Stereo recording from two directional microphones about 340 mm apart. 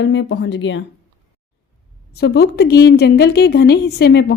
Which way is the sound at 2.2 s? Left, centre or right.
Left.